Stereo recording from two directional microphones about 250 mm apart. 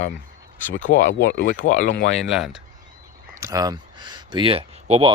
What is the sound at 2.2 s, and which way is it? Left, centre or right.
Speech, centre.